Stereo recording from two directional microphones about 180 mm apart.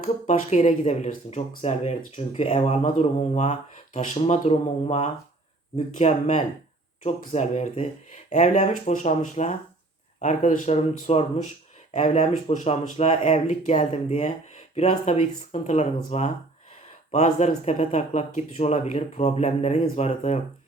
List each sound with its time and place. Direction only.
0.0 s speech: 40° left (ahead or behind)